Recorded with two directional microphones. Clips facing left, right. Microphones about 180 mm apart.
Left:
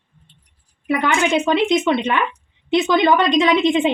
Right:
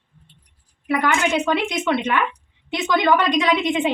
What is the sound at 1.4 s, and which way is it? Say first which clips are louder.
A woman's voice: left 5 dB; 25° left (ahead or behind).